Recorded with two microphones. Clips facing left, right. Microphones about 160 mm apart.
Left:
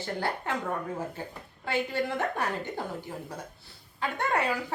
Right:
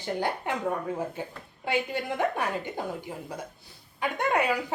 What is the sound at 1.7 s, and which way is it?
Speech, 15° right (ahead or behind).